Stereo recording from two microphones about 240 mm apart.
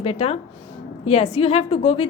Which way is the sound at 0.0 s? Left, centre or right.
Left.